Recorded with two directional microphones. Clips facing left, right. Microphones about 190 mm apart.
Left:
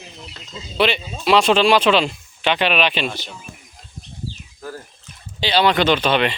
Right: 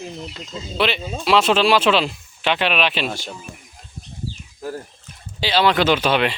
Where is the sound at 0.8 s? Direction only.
Centre (ahead or behind).